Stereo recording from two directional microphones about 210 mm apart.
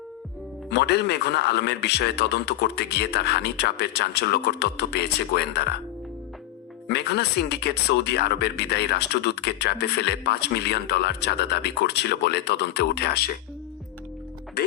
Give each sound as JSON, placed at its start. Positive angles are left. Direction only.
{"t": 0.7, "sound": "speech", "side_deg": 50}
{"t": 6.8, "sound": "speech", "side_deg": 50}